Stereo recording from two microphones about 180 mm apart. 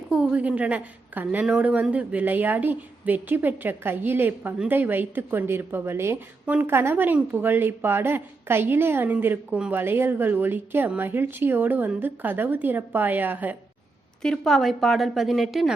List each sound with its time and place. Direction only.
0.1 s a woman's voice: 5° right (ahead or behind)
14.2 s a woman's voice: 5° left (ahead or behind)